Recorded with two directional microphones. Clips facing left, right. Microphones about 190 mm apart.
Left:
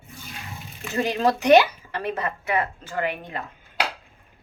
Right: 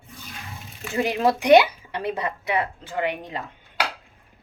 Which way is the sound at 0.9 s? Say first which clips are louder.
Right 1 dB; 10° right (ahead or behind).